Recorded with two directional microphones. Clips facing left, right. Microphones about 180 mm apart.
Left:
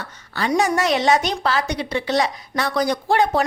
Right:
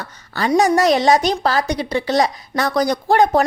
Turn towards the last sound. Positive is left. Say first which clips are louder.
# right 4 dB
turn(degrees=-40)  # may be behind; listen again after turning